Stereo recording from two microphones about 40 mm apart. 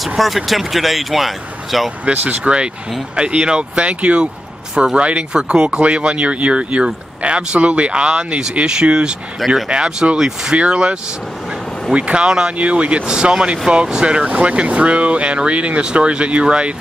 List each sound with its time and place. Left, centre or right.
0.0 s speech: centre
2.0 s speech: right
10.6 s speech: right
12.3 s speech: centre
12.5 s speech: right